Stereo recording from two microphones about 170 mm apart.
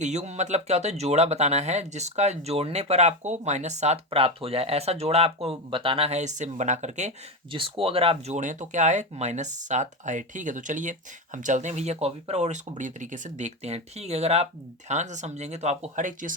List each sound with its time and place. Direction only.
0.0 s speech: 40° right (ahead or behind)
7.5 s speech: 30° right (ahead or behind); by 16.3 s 50° right (ahead or behind)